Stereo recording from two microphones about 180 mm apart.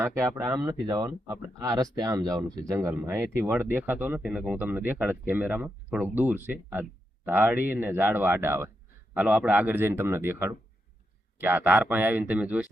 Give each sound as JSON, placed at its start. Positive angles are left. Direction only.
{"t": 0.0, "sound": "speech", "side_deg": -15}